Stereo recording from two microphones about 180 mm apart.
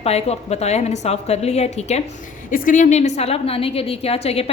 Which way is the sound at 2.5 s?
45° left (ahead or behind).